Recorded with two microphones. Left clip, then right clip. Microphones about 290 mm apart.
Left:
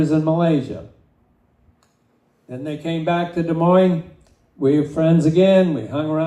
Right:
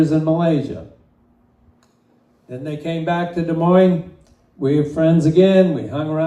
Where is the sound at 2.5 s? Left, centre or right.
Left.